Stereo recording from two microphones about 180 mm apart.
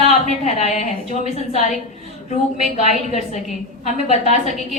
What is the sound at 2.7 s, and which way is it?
A woman's voice, 40° left (ahead or behind).